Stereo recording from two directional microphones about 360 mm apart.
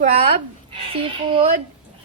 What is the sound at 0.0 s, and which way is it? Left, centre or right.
Speech, centre.